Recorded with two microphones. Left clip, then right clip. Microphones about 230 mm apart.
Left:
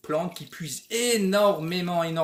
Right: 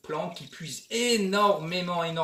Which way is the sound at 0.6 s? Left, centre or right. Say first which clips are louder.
Left 1 dB; left.